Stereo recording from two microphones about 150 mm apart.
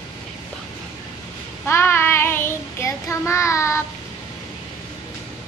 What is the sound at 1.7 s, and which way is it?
Child singing, 15° left (ahead or behind).